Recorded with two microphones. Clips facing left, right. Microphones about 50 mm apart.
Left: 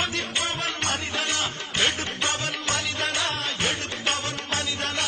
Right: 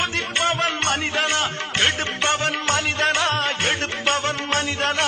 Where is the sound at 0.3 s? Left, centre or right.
Right.